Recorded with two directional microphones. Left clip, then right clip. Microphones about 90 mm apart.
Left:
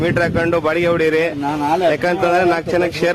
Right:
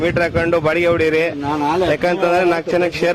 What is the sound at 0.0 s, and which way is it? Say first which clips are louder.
A man's voice: even; centre (ahead or behind).